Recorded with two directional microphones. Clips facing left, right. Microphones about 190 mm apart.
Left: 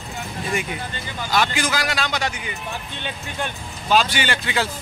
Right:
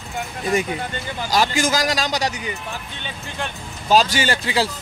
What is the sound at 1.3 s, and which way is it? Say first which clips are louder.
Speech: right 2 dB; 40° right (ahead or behind).